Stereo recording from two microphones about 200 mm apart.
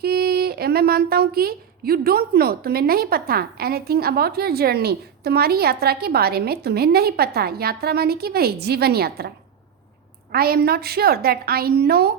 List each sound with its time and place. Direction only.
0.0 s speech: 50° right (ahead or behind)
10.3 s speech: 50° right (ahead or behind)